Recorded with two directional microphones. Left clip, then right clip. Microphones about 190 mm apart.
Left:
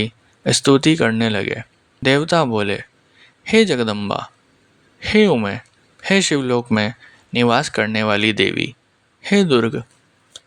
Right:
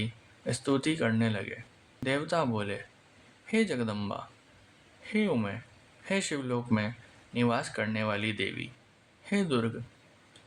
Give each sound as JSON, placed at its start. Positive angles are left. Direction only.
{"t": 0.0, "sound": "speech", "side_deg": 45}
{"t": 5.0, "sound": "speech", "side_deg": 45}